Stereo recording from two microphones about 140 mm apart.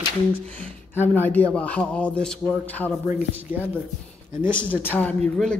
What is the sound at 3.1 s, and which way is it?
Speech, 15° right (ahead or behind).